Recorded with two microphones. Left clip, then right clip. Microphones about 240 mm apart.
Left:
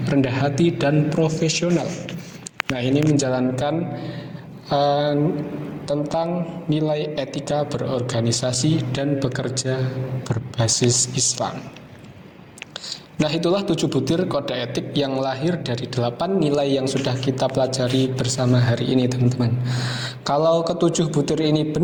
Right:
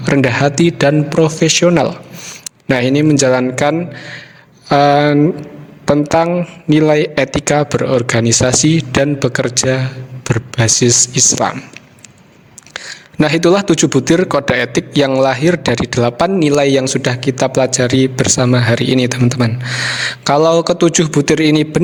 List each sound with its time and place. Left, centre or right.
0.0 s a man's voice: right
12.7 s a man's voice: right